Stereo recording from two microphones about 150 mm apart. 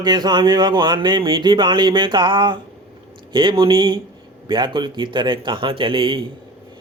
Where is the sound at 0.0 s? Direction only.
30° right (ahead or behind).